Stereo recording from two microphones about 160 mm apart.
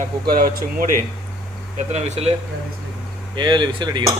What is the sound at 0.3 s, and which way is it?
Speech, 65° right (ahead or behind).